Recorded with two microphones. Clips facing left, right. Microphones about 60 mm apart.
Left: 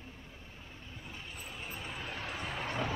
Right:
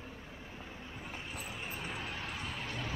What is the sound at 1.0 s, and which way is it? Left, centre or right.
Vehicle, right.